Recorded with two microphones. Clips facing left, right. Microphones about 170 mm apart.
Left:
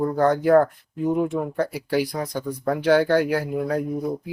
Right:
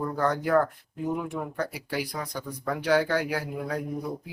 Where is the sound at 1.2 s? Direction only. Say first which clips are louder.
Left 8 dB; 25° left (ahead or behind).